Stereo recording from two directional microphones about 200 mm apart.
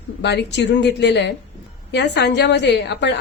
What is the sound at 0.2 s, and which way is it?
A woman's voice, 60° left (ahead or behind).